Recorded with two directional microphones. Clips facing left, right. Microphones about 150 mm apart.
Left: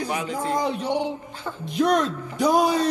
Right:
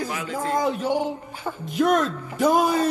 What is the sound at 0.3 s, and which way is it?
Speech, 15° left (ahead or behind).